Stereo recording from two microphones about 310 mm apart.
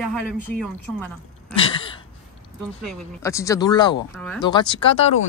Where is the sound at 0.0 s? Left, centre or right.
Centre.